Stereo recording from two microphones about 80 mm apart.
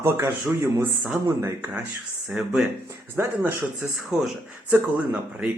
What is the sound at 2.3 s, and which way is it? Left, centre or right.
Speech, centre.